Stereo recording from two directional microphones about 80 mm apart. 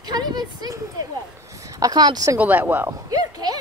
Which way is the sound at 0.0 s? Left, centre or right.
Right.